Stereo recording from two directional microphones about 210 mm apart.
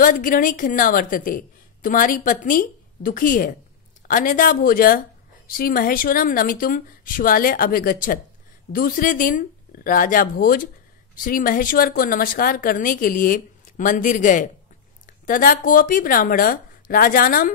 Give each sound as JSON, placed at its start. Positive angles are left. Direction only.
{"t": 0.0, "sound": "a woman's voice", "side_deg": 40}